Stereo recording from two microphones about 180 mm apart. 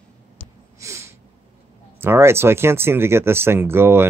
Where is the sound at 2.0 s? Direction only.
15° right (ahead or behind).